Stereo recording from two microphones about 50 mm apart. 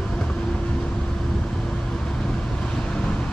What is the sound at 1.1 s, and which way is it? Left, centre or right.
Vehicle, centre.